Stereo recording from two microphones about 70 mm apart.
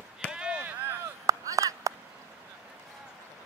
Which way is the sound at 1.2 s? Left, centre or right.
Right.